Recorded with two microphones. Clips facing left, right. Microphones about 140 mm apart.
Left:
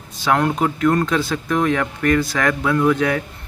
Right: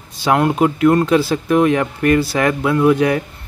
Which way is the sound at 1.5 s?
15° right (ahead or behind).